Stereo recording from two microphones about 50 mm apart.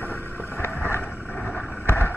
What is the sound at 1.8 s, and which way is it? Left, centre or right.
Boat, left.